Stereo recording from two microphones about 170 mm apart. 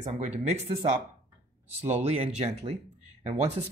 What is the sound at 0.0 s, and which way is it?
Speech, 40° right (ahead or behind).